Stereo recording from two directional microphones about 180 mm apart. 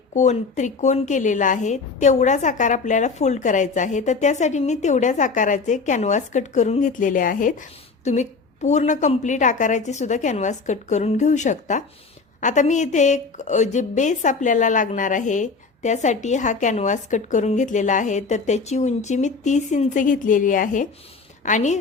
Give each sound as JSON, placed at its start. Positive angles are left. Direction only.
{"t": 0.1, "sound": "a woman's voice", "side_deg": 40}